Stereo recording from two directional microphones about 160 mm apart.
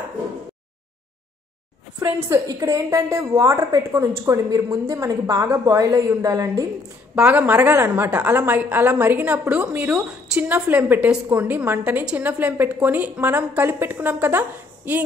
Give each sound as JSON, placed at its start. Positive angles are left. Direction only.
{"t": 2.0, "sound": "a woman's voice", "side_deg": -15}
{"t": 7.2, "sound": "a woman's voice", "side_deg": -10}